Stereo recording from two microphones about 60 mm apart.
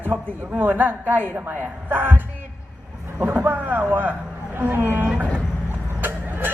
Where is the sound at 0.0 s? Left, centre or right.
Right.